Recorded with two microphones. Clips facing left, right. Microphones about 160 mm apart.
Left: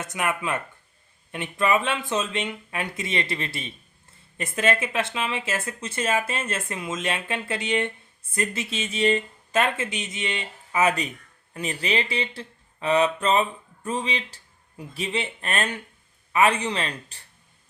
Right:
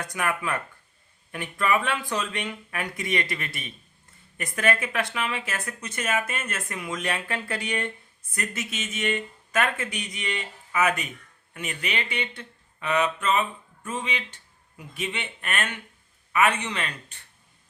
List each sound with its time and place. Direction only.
0.0 s a man's voice: 20° left (ahead or behind)